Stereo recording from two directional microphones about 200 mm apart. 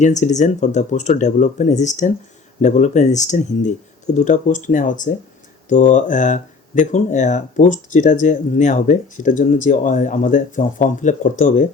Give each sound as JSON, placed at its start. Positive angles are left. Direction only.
{"t": 0.0, "sound": "speech", "side_deg": 35}